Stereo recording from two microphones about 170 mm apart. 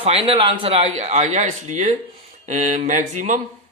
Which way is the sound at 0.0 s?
35° right (ahead or behind).